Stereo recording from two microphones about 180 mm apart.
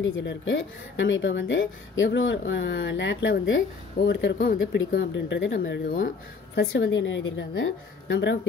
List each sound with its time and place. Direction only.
0.0 s speech: 85° left